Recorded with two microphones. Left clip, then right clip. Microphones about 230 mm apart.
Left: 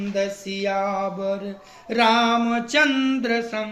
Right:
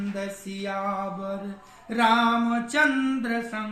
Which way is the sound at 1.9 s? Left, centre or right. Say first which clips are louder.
Left 3 dB; centre.